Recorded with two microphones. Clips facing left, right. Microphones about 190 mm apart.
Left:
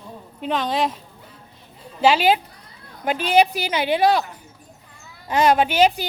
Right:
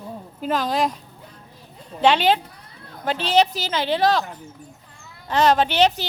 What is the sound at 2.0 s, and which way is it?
A woman's voice, 5° left (ahead or behind).